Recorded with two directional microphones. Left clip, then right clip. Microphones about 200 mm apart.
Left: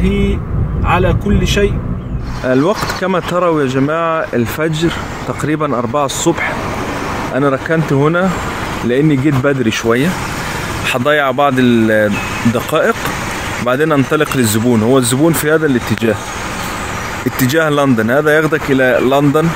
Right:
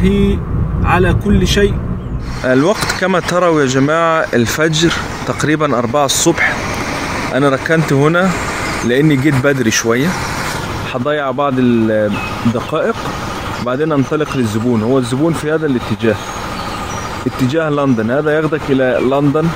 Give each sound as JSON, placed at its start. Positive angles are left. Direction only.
{"t": 0.8, "sound": "speech", "side_deg": -5}
{"t": 2.4, "sound": "speech", "side_deg": -10}
{"t": 10.9, "sound": "speech", "side_deg": 15}
{"t": 17.4, "sound": "speech", "side_deg": 15}